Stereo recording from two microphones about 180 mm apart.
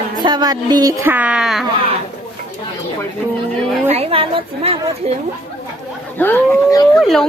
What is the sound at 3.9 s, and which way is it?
A woman's voice, 35° right (ahead or behind).